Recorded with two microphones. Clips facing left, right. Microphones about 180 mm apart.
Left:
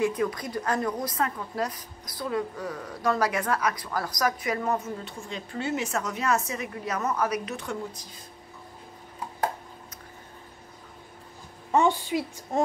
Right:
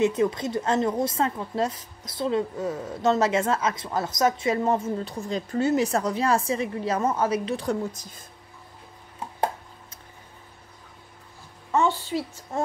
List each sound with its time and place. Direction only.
0.0 s a woman's voice: 25° right (ahead or behind)
11.7 s a woman's voice: 15° left (ahead or behind)